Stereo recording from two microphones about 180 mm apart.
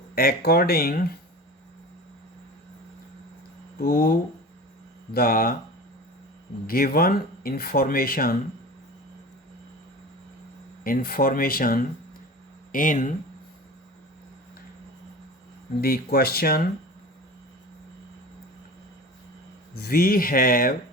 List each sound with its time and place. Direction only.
0.2 s speech: 55° left (ahead or behind)
3.8 s speech: 55° left (ahead or behind)
6.7 s speech: 55° left (ahead or behind)
10.8 s speech: 55° left (ahead or behind)
15.8 s speech: 55° left (ahead or behind)
19.7 s speech: 55° left (ahead or behind)